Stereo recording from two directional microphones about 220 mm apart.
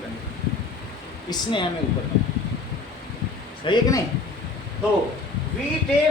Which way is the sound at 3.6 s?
20° left (ahead or behind).